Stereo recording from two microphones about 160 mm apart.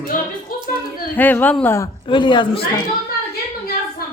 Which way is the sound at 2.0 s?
30° left (ahead or behind).